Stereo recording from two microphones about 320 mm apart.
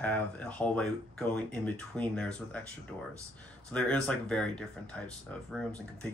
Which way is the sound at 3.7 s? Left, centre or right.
Centre.